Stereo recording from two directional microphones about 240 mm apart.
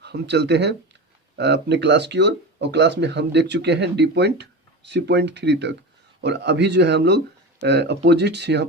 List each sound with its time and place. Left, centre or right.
0.0 s speech: right